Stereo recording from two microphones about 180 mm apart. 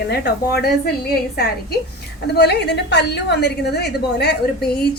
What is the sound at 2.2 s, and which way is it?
A woman's voice, 65° left (ahead or behind).